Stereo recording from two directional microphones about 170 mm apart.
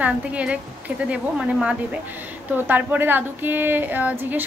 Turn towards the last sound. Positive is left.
turn(degrees=-10)  # may be behind; listen again after turning